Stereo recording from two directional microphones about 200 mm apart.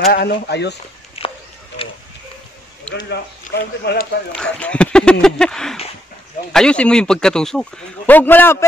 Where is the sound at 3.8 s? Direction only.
45° left (ahead or behind).